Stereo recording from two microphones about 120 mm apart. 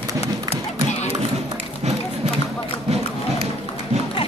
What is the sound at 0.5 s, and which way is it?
Music, 70° left (ahead or behind).